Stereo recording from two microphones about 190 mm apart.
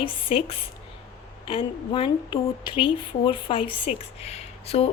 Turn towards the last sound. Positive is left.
turn(degrees=30)  # may be behind; listen again after turning